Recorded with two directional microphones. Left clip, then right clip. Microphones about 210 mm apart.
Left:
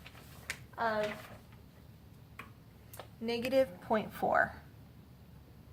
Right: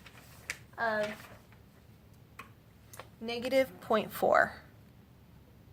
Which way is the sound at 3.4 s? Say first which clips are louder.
Right 2 dB; 35° right (ahead or behind).